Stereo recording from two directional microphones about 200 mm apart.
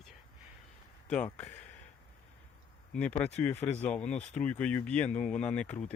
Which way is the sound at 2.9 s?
5° left (ahead or behind).